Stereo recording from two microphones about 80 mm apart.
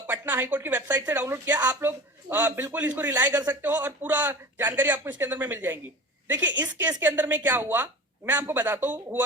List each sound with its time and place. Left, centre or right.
0.1 s a man's voice: right